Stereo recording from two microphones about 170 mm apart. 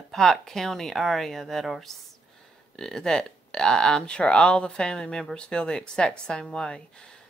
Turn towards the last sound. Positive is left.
turn(degrees=5)  # may be behind; listen again after turning